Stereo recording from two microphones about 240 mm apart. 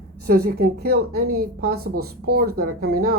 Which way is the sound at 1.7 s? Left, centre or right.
Right.